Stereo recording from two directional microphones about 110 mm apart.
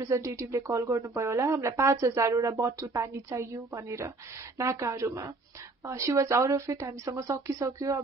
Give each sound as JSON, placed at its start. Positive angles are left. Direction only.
{"t": 0.0, "sound": "speech", "side_deg": -30}